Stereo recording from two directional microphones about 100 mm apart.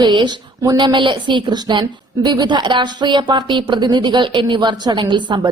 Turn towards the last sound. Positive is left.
turn(degrees=-50)  # may be behind; listen again after turning